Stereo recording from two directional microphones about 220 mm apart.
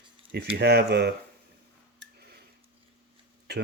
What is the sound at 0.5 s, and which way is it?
Speech, 45° right (ahead or behind).